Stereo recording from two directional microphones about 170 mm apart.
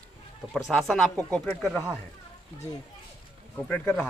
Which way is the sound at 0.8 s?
Centre (ahead or behind).